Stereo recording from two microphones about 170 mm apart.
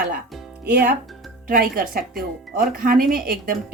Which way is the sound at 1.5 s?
55° right (ahead or behind).